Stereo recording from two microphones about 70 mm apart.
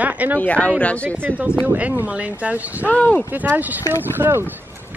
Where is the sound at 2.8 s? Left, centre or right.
Left.